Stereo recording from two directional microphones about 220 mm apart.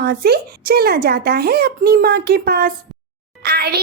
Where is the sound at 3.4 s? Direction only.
45° right (ahead or behind).